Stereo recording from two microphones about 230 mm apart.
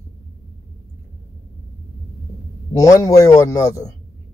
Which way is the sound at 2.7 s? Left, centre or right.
Centre.